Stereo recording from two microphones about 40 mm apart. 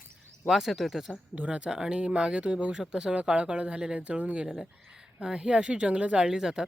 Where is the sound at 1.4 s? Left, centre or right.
Right.